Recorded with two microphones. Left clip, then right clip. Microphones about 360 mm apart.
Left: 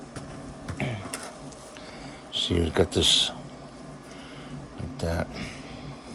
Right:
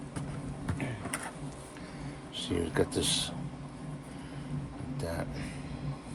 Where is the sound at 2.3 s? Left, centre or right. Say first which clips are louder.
Left 7 dB; left.